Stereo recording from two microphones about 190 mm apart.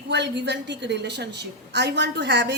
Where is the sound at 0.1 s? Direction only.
65° right (ahead or behind).